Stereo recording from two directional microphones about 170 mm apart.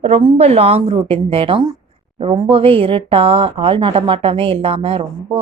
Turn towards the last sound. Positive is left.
turn(degrees=-30)  # may be behind; listen again after turning